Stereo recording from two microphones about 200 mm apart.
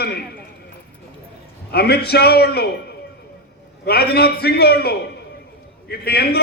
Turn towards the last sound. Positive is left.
turn(degrees=50)  # may be behind; listen again after turning